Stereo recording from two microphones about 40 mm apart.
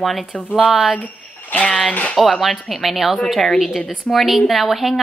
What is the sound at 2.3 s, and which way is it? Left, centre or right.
Speech, centre.